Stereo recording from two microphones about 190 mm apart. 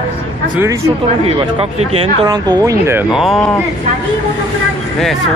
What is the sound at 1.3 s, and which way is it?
Speech, 30° right (ahead or behind).